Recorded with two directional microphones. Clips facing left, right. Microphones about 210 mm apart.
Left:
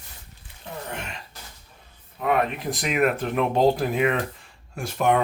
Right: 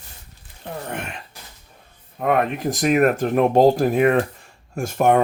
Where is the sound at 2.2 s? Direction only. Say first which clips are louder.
Right 4 dB; 45° right (ahead or behind).